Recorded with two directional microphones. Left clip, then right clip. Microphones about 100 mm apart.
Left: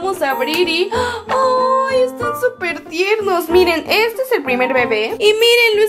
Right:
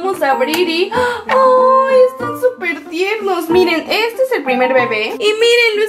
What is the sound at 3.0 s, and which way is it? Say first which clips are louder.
A woman's voice: left 1 dB; 35° left (ahead or behind).